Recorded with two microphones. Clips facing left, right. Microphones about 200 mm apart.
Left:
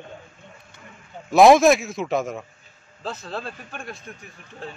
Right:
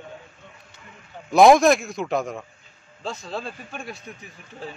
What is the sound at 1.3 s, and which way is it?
A man's voice, centre (ahead or behind).